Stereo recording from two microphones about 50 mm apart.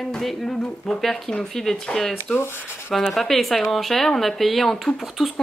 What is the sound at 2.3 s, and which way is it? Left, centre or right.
Speech, left.